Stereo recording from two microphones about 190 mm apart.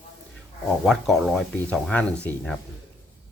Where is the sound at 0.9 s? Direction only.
Centre (ahead or behind).